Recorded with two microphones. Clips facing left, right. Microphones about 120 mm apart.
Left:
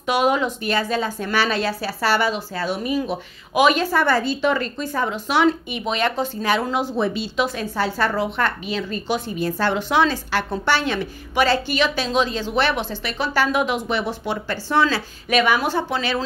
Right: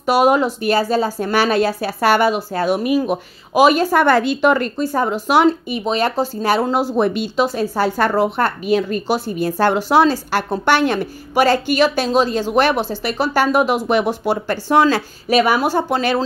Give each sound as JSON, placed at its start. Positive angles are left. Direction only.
{"t": 0.0, "sound": "speech", "side_deg": -45}
{"t": 3.5, "sound": "speech", "side_deg": -40}
{"t": 4.0, "sound": "speech", "side_deg": -60}